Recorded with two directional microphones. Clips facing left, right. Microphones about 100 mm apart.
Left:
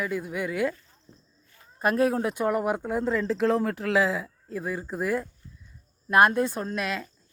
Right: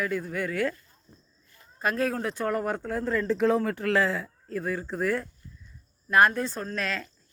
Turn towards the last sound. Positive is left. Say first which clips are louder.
# left 2 dB
turn(degrees=10)  # may be behind; listen again after turning